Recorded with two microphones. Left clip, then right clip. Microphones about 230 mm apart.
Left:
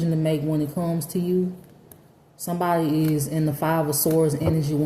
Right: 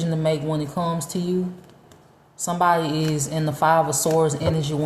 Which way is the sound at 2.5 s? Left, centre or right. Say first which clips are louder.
Right 3 dB; right.